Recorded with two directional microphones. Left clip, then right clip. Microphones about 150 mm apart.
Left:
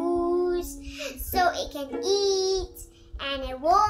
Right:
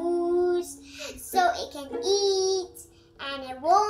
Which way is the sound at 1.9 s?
20° left (ahead or behind).